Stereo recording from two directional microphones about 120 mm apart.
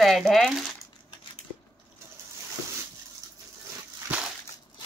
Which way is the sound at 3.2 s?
30° right (ahead or behind).